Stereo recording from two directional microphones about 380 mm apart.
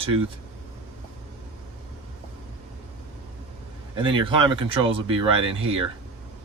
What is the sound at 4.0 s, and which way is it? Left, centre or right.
Speech, centre.